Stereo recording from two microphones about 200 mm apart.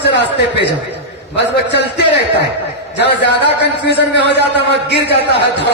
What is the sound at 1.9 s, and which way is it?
Speech, 55° left (ahead or behind).